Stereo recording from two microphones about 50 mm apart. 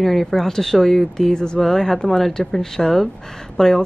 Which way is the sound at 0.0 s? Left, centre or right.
Centre.